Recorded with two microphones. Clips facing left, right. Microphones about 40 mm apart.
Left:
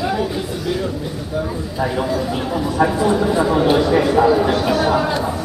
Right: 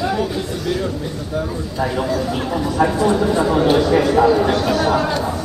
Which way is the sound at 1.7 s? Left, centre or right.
Centre.